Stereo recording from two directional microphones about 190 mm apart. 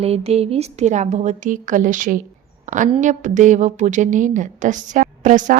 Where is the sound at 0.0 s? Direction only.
30° right (ahead or behind).